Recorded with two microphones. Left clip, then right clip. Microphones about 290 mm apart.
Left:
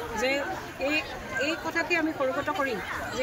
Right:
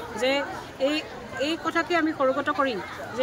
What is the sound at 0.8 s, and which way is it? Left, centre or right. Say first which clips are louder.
Speech: right 2 dB; centre.